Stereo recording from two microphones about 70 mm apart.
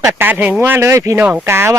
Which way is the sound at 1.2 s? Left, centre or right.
Right.